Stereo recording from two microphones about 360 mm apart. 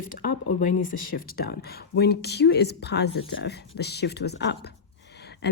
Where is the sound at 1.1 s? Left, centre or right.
Left.